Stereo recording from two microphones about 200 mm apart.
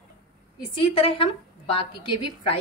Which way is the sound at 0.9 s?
25° left (ahead or behind).